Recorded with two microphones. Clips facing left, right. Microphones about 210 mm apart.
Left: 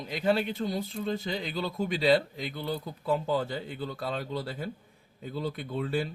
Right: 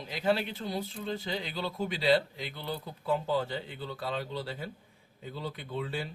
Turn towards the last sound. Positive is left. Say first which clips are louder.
# left 5 dB
turn(degrees=50)  # may be behind; listen again after turning